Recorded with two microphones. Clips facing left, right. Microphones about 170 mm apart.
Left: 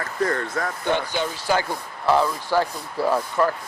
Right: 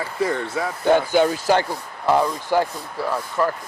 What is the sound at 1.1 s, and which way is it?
Speech, 50° right (ahead or behind).